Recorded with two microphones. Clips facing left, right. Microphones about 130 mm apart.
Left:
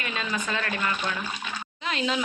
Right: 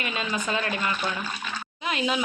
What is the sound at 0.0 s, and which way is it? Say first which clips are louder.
Speech: right 2 dB; 15° right (ahead or behind).